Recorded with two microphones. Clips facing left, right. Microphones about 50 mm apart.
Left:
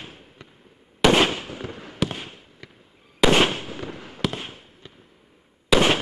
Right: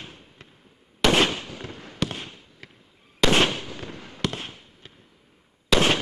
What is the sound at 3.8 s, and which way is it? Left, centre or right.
Fireworks, centre.